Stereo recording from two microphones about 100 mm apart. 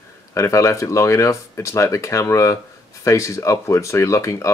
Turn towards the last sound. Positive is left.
turn(degrees=30)  # may be behind; listen again after turning